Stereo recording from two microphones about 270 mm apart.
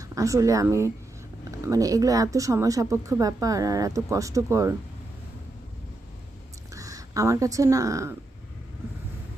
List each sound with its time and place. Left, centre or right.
0.0 s speech: centre
6.7 s speech: centre